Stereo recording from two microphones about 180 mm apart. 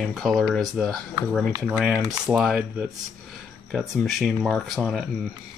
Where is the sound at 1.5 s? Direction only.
20° right (ahead or behind).